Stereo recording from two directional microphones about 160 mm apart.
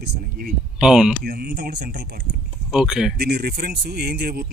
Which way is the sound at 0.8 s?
5° right (ahead or behind).